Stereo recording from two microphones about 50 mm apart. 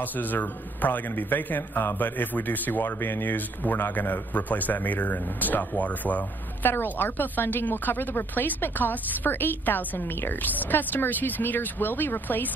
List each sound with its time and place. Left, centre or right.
0.0 s a man's voice: left
6.7 s a man's voice: left